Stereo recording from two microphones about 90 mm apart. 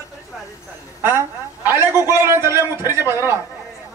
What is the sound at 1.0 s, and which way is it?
A woman's voice, 25° right (ahead or behind).